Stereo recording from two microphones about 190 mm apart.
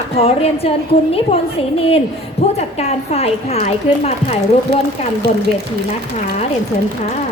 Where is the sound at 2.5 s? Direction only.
35° left (ahead or behind).